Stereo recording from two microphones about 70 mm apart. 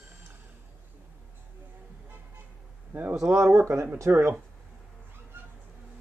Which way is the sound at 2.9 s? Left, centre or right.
Right.